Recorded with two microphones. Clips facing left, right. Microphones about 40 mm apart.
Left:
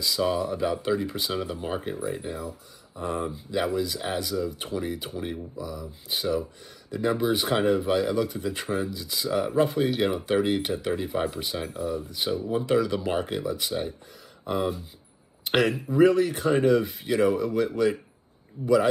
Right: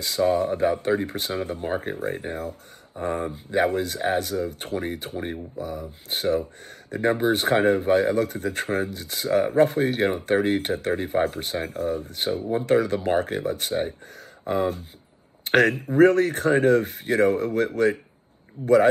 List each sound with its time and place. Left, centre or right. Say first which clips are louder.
0.0 s speech: right 4 dB; right
15.5 s speech: right 4 dB; right